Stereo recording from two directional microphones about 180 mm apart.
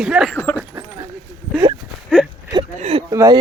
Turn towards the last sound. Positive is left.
turn(degrees=-15)  # may be behind; listen again after turning